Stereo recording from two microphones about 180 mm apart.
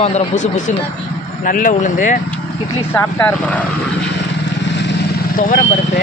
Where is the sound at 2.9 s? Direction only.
10° left (ahead or behind).